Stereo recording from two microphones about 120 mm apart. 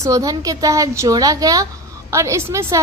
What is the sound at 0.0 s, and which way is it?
A woman's voice, 30° right (ahead or behind).